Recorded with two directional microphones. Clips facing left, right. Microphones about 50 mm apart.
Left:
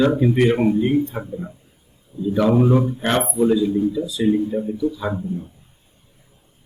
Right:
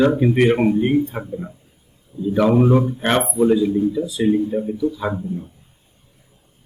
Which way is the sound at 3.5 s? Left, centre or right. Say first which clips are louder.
Right 1 dB; right.